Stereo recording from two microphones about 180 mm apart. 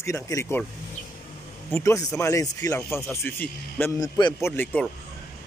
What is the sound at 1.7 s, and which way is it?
Speech, 15° left (ahead or behind).